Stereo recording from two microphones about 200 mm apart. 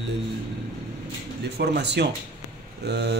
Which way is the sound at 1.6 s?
55° right (ahead or behind).